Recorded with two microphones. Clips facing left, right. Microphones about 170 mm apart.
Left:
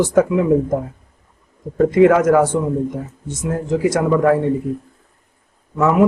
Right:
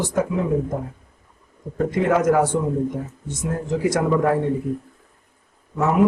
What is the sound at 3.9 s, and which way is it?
Speech, 90° left.